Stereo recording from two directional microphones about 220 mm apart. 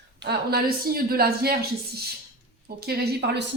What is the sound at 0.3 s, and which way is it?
Speech, 45° right (ahead or behind).